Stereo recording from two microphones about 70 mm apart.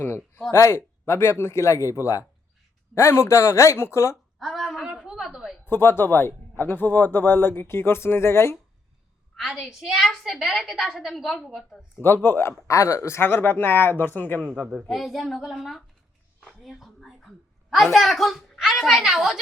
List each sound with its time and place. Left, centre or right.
0.5 s a man's voice: left
4.4 s a sound: centre
4.9 s a sound: centre
5.6 s a man's voice: left
9.5 s a woman's voice: centre
12.0 s a man's voice: left
14.6 s a woman's voice: centre
16.4 s a sound: centre
16.8 s speech: centre